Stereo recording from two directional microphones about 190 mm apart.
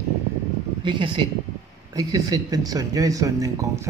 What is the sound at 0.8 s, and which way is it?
Speech, 25° right (ahead or behind).